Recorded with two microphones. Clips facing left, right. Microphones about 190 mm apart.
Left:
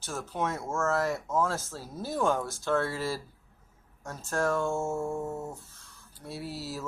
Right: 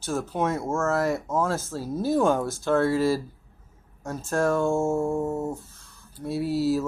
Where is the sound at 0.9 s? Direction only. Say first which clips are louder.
Right 3 dB; 5° right (ahead or behind).